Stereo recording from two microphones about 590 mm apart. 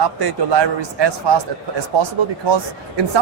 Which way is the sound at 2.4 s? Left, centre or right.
Right.